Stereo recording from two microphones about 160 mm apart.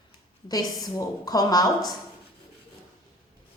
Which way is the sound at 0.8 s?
25° left (ahead or behind).